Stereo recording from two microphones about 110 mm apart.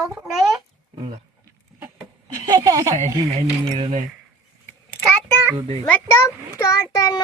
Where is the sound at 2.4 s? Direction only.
35° right (ahead or behind).